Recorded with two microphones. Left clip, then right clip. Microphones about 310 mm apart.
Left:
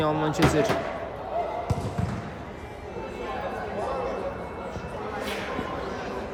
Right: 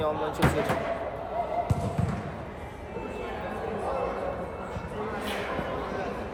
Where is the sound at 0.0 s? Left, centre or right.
Left.